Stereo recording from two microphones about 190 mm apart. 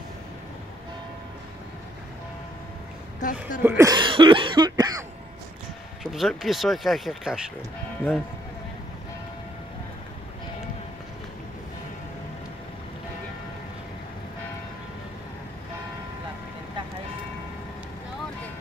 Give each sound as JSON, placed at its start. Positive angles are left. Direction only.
{"t": 3.2, "sound": "speech", "side_deg": 45}
{"t": 3.6, "sound": "cough", "side_deg": -15}
{"t": 6.1, "sound": "speech", "side_deg": 0}